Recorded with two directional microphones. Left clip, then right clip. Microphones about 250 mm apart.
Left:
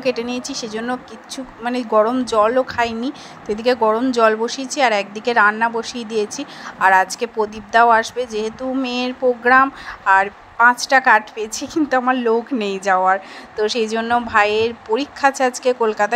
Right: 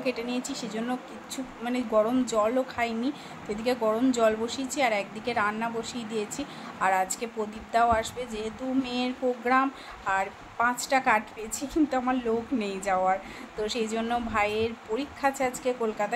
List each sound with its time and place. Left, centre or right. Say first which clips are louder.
0.0 s a woman's voice: left 9 dB; left